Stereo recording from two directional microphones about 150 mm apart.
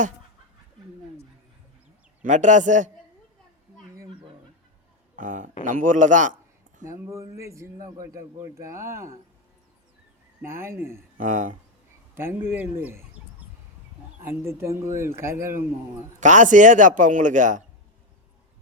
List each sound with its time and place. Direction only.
2.2 s speech: 55° right (ahead or behind)
5.1 s speech: 60° right (ahead or behind)
6.8 s a man's voice: 20° right (ahead or behind)
10.4 s speech: 15° right (ahead or behind)
11.2 s speech: 60° right (ahead or behind)
12.1 s speech: 15° right (ahead or behind)
14.2 s speech: 20° right (ahead or behind)
16.2 s speech: 55° right (ahead or behind)